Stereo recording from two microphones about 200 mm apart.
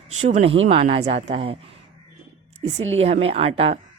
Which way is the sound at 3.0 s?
30° right (ahead or behind).